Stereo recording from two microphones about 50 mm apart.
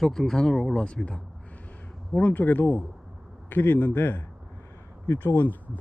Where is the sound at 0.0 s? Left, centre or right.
Centre.